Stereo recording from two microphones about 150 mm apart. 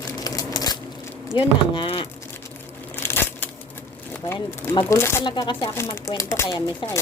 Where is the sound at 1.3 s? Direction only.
35° left (ahead or behind).